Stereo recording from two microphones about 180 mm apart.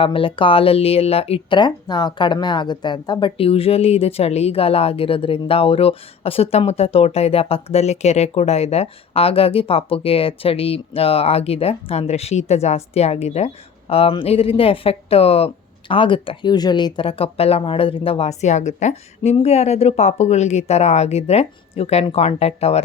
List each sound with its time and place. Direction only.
0.0 s speech: 30° left (ahead or behind)